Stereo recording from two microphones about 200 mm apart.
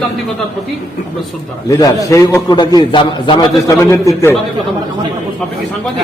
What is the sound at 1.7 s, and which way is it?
A man's voice, 15° left (ahead or behind).